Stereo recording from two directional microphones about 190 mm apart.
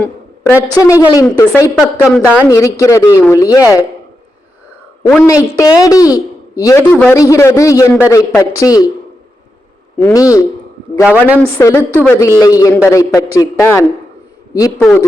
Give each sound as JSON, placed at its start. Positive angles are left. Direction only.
{"t": 0.0, "sound": "a woman's voice", "side_deg": 10}
{"t": 2.0, "sound": "a woman's voice", "side_deg": -5}
{"t": 2.5, "sound": "a man's voice", "side_deg": 15}
{"t": 5.0, "sound": "a man's voice", "side_deg": 15}
{"t": 10.0, "sound": "a man's voice", "side_deg": 15}
{"t": 11.0, "sound": "a woman's voice", "side_deg": -5}
{"t": 11.3, "sound": "a man's voice", "side_deg": 15}